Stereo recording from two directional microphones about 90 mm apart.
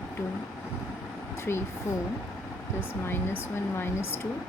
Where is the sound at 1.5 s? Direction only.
25° left (ahead or behind).